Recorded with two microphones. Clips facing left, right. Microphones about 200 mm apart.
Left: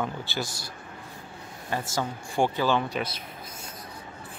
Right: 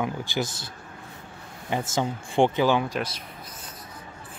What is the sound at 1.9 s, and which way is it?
Speech, 20° right (ahead or behind).